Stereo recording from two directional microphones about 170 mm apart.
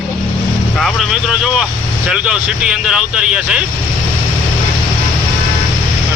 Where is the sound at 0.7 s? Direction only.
Centre (ahead or behind).